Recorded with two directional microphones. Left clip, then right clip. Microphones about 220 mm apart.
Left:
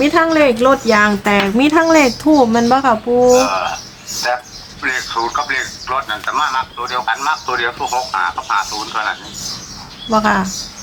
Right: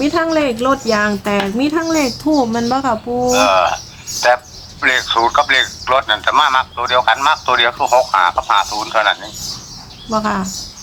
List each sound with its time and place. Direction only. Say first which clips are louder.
0.0 s a woman's voice: left 3 dB; centre (ahead or behind)
3.3 s speech: right 2 dB; 45° right (ahead or behind)
10.1 s a woman's voice: left 4 dB; 5° left (ahead or behind)